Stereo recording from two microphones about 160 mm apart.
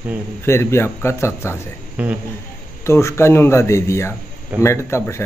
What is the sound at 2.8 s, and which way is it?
Speech, 15° left (ahead or behind).